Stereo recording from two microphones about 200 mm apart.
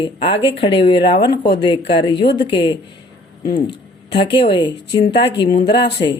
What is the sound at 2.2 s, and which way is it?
Speech, 55° left (ahead or behind).